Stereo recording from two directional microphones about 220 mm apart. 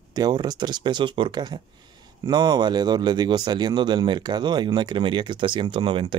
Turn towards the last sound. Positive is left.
turn(degrees=-25)  # may be behind; listen again after turning